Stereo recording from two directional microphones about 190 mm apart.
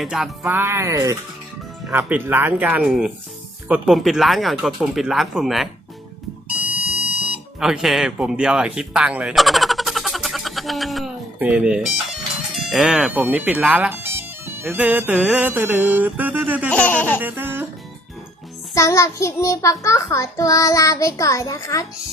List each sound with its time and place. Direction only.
0.0 s speech: 5° right (ahead or behind)
7.6 s speech: 5° right (ahead or behind)
16.7 s a child's voice: 10° left (ahead or behind)
17.2 s a sound: 10° right (ahead or behind)
18.7 s a child's voice: 15° left (ahead or behind)